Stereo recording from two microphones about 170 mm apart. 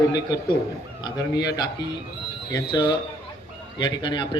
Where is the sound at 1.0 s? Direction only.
25° left (ahead or behind).